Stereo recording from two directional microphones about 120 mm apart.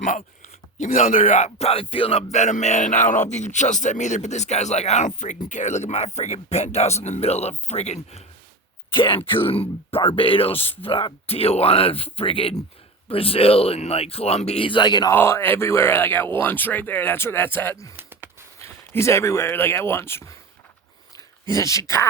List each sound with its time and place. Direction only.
0.0 s speech: 90° left; by 8.2 s 65° left (ahead or behind)
8.9 s speech: 45° left (ahead or behind)
15.1 s speech: 20° left (ahead or behind)
17.9 s a sound: 15° right (ahead or behind)
18.6 s speech: 20° left (ahead or behind)
21.5 s speech: 25° left (ahead or behind)